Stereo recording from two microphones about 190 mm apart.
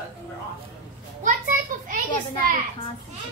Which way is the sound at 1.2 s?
45° right (ahead or behind).